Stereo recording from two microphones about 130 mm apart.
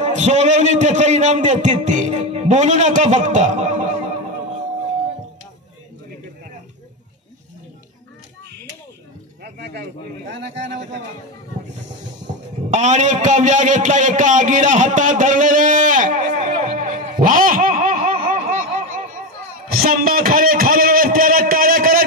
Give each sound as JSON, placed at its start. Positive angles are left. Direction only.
{"t": 0.0, "sound": "a man's voice", "side_deg": -60}
{"t": 12.7, "sound": "a sound", "side_deg": -65}
{"t": 20.1, "sound": "a man's voice", "side_deg": -90}